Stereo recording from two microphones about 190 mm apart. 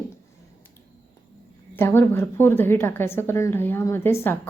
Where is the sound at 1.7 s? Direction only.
10° left (ahead or behind).